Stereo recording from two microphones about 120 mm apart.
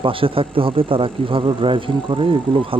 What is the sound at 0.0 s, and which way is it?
Speech, 45° right (ahead or behind).